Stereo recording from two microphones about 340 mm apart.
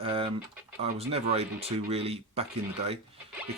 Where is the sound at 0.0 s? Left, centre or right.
Centre.